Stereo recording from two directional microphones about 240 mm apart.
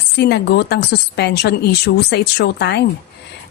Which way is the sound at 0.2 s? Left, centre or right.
Left.